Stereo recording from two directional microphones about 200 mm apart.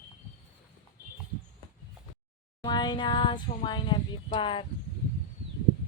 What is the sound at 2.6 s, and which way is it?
Speech, 20° left (ahead or behind).